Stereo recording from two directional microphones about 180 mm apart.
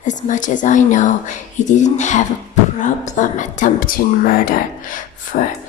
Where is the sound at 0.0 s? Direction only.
45° left (ahead or behind).